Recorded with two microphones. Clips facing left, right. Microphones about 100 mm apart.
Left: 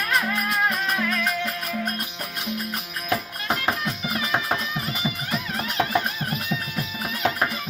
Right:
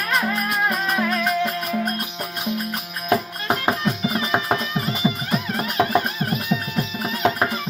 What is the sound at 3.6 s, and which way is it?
Music, 25° right (ahead or behind).